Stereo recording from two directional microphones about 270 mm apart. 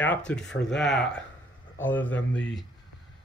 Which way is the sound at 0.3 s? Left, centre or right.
Centre.